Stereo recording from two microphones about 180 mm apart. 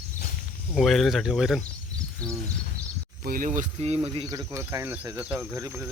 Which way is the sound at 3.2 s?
50° right (ahead or behind).